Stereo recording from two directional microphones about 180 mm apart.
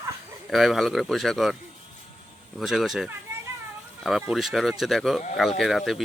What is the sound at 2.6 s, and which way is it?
Speech, centre (ahead or behind).